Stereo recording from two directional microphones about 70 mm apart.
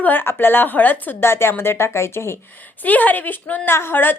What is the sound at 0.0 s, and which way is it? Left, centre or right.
A woman's voice, left.